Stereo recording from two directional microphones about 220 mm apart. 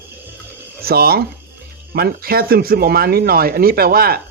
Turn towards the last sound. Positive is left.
turn(degrees=-45)  # may be behind; listen again after turning